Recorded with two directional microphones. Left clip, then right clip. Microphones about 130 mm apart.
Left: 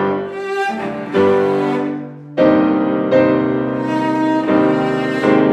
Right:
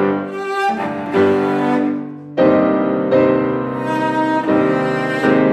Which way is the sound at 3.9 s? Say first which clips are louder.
Right 1 dB; 35° right (ahead or behind).